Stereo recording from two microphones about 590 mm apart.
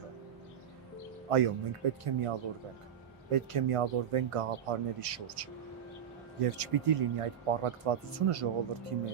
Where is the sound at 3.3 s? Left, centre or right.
Right.